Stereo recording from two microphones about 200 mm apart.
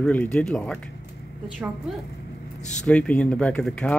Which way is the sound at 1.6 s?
10° right (ahead or behind).